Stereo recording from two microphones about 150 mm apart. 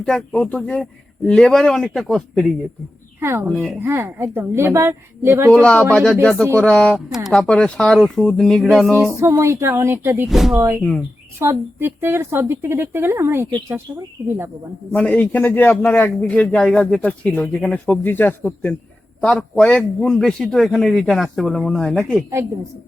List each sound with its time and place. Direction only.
0.0 s a man's voice: 5° left (ahead or behind)
3.2 s speech: 15° right (ahead or behind)
3.4 s a man's voice: centre (ahead or behind)
3.8 s a woman's voice: 15° right (ahead or behind)
5.5 s a man's voice: 5° left (ahead or behind)
9.1 s a woman's voice: 20° right (ahead or behind)
10.2 s a man's voice: centre (ahead or behind)
11.3 s a woman's voice: 15° right (ahead or behind)
14.9 s a man's voice: 10° left (ahead or behind)